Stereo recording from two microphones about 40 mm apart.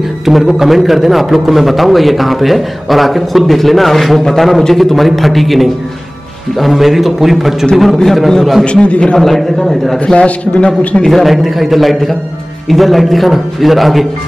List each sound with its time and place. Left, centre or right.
0.2 s a man's voice: centre
8.6 s a man's voice: left
9.2 s a man's voice: centre
10.1 s a man's voice: left
11.1 s a man's voice: centre